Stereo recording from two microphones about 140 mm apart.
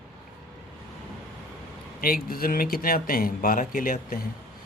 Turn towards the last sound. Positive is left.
turn(degrees=90)